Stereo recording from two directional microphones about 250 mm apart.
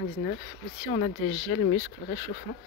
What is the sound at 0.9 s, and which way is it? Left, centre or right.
Speech, left.